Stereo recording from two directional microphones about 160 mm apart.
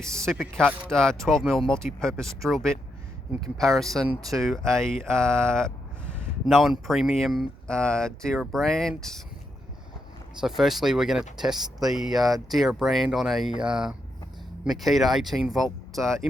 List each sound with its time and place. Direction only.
0.0 s speech: 5° left (ahead or behind)
10.4 s speech: centre (ahead or behind)